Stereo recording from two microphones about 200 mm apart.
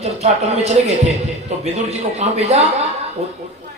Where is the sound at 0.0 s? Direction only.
35° right (ahead or behind).